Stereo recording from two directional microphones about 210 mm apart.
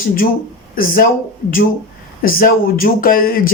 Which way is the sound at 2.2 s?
45° left (ahead or behind).